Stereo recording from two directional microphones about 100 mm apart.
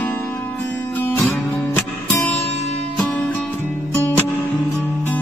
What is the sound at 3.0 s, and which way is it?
Music, 10° left (ahead or behind).